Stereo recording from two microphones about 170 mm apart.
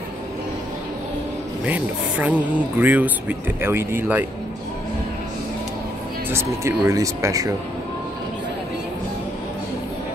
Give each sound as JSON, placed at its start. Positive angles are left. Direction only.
{"t": 1.7, "sound": "speech", "side_deg": -10}
{"t": 6.3, "sound": "speech", "side_deg": -15}